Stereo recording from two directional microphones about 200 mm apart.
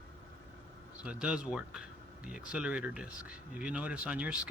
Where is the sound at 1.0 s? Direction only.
5° right (ahead or behind).